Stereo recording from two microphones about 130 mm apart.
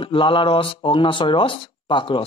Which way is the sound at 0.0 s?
40° left (ahead or behind).